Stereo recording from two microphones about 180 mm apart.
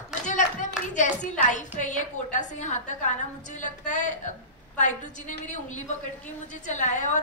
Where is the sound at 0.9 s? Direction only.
45° left (ahead or behind).